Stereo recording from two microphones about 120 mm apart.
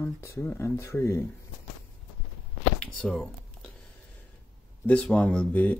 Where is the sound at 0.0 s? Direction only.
20° left (ahead or behind).